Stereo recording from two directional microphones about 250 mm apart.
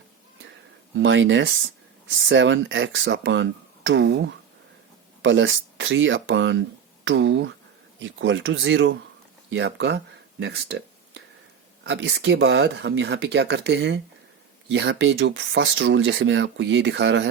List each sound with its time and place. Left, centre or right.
0.9 s speech: right
10.4 s a sound: right
11.8 s speech: right